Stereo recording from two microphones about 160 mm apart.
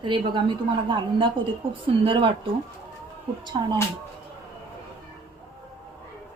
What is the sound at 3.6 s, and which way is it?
Speech, 35° right (ahead or behind).